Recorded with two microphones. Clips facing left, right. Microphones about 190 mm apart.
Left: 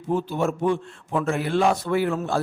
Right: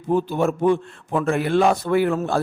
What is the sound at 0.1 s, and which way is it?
A man's voice, 55° right (ahead or behind).